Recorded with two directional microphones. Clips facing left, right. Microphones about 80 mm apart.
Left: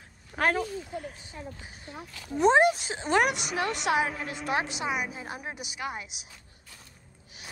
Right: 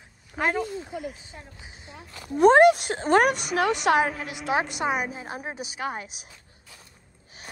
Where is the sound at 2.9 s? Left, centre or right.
Right.